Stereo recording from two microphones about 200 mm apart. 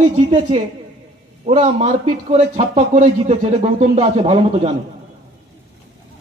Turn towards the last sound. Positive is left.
turn(degrees=-30)  # may be behind; listen again after turning